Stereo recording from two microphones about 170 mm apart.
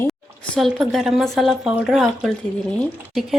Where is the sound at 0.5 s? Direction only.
Centre (ahead or behind).